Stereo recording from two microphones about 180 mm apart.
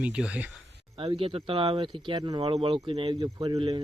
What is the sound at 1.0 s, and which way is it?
Speech, 30° right (ahead or behind).